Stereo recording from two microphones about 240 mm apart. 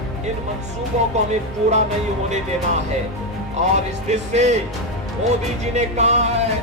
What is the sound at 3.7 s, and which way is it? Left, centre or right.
Music, right.